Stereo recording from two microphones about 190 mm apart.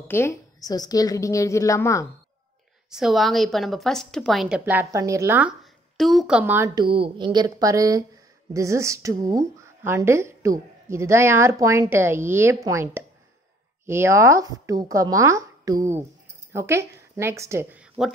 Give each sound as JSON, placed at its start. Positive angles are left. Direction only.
{"t": 0.1, "sound": "a woman's voice", "side_deg": 15}
{"t": 2.9, "sound": "a woman's voice", "side_deg": 0}